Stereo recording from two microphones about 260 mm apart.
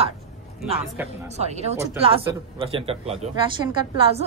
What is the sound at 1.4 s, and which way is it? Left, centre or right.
A woman's voice, right.